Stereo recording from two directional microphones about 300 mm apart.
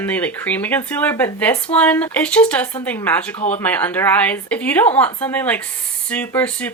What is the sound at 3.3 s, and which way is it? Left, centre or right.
Speech, left.